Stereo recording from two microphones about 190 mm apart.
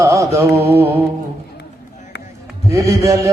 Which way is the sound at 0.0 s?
15° right (ahead or behind).